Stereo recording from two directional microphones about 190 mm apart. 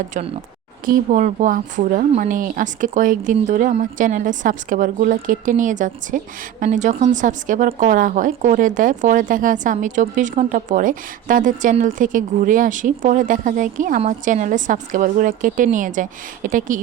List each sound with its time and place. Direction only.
0.9 s a woman's voice: 40° right (ahead or behind)